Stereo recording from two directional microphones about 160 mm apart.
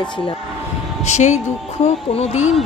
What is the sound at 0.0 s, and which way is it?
Speech, 35° left (ahead or behind).